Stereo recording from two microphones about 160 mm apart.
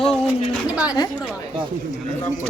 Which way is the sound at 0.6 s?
5° right (ahead or behind).